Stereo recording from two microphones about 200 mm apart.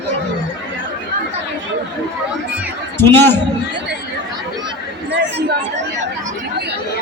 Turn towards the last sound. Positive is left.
turn(degrees=-60)  # may be behind; listen again after turning